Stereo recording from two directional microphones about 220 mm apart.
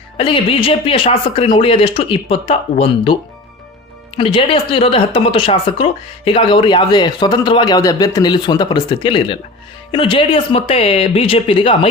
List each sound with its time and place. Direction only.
0.2 s speech: 25° left (ahead or behind)
4.2 s speech: 25° left (ahead or behind)